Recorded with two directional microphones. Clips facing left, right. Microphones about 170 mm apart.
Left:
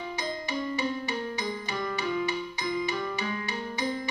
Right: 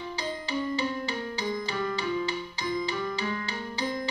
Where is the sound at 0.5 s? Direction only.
35° right (ahead or behind).